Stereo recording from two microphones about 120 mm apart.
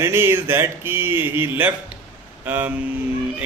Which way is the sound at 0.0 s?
20° right (ahead or behind).